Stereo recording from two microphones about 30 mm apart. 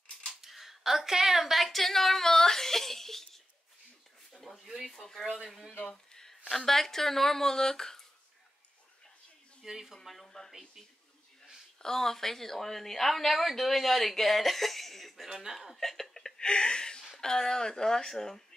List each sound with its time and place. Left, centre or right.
0.3 s speech: centre
4.3 s a sound: centre
4.6 s speech: centre
4.9 s speech: centre
6.5 s speech: centre
9.7 s speech: centre
10.2 s speech: centre
11.8 s a woman's voice: centre